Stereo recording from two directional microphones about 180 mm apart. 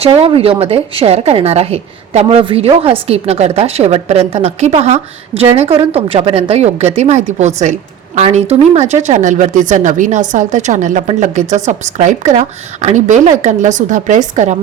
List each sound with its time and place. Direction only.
0.0 s speech: 30° right (ahead or behind)